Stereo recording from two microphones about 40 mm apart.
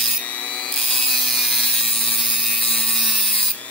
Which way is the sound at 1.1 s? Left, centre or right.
Centre.